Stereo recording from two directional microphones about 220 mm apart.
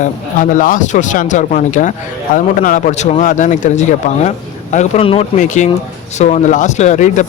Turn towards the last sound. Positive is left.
turn(degrees=35)  # may be behind; listen again after turning